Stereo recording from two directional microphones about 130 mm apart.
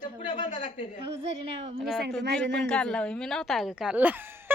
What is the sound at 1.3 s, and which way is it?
Speech, 50° right (ahead or behind).